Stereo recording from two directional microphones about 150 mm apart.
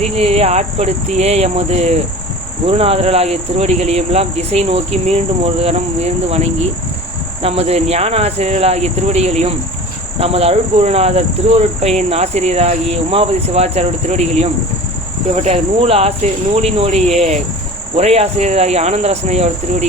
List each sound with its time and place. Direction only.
0.0 s speech: 40° right (ahead or behind)